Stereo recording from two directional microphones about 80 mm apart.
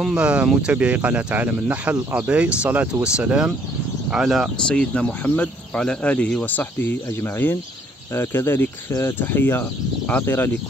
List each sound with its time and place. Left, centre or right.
0.1 s speech: centre
4.1 s speech: centre
4.6 s speech: centre